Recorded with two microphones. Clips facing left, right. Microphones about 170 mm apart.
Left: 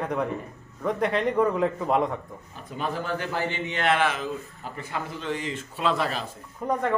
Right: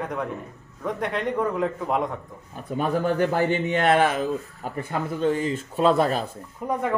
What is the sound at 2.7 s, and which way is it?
A man's voice, 50° right (ahead or behind).